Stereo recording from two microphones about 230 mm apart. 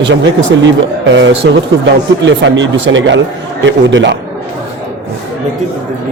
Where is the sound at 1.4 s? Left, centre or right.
Right.